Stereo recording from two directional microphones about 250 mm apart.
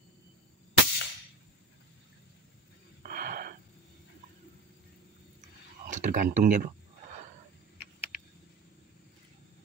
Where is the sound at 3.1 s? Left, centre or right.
Right.